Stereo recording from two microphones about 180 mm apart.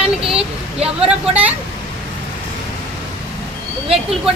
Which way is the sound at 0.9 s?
5° right (ahead or behind).